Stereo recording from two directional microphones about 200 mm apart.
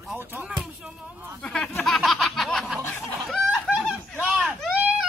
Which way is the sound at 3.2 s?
Centre (ahead or behind).